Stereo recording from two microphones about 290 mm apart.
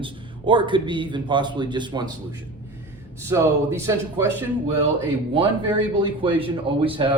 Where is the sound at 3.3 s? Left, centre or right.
Centre.